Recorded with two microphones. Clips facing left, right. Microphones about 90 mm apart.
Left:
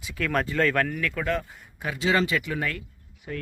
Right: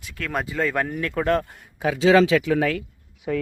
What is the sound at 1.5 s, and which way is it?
A man's voice, 90° right.